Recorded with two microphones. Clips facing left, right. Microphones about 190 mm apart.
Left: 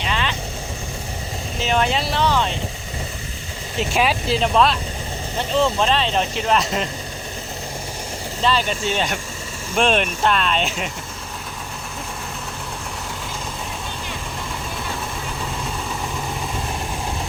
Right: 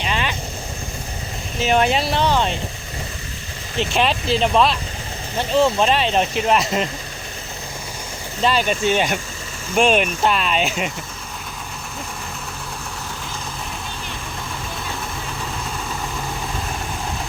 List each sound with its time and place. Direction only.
0.1 s vehicle: 15° right (ahead or behind)
1.7 s speech: 15° right (ahead or behind)
3.8 s speech: 5° left (ahead or behind)
5.6 s speech: 15° right (ahead or behind)
8.4 s speech: 15° right (ahead or behind)